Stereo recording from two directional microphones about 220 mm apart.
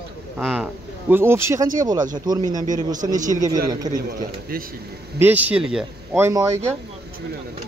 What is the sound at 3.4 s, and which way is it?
Speech, 15° right (ahead or behind).